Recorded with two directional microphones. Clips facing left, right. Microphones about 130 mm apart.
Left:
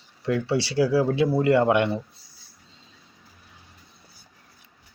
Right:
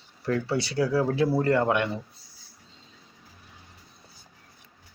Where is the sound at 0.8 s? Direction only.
5° left (ahead or behind).